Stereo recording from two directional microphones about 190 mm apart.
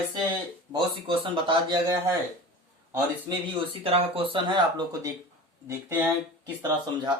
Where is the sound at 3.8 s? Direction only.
30° right (ahead or behind).